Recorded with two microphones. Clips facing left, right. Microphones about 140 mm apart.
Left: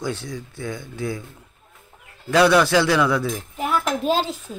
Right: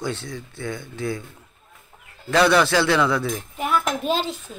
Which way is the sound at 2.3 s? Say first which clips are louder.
Left 2 dB; 10° left (ahead or behind).